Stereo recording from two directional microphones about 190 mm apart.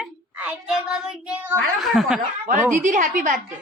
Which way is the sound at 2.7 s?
40° right (ahead or behind).